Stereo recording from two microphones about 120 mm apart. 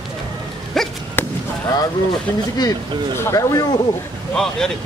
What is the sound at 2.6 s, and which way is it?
Speech, 25° left (ahead or behind).